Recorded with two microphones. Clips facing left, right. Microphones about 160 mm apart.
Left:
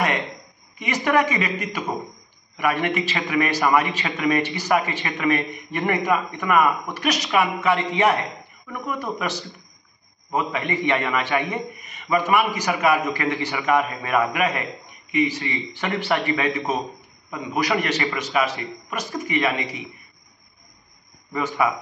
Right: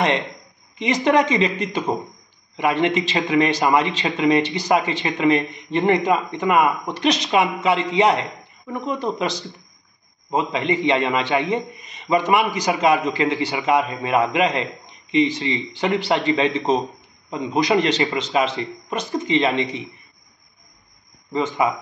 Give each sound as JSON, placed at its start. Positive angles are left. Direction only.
{"t": 0.7, "sound": "a man's voice", "side_deg": -20}
{"t": 21.3, "sound": "a man's voice", "side_deg": -20}